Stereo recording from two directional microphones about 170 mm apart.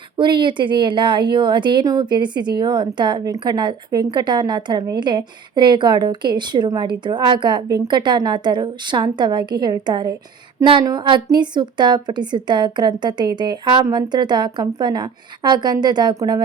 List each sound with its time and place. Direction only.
0.2 s a woman's voice: 30° right (ahead or behind)